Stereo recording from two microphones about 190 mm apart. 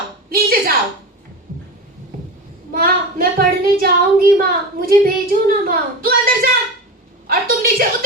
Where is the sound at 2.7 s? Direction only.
50° right (ahead or behind).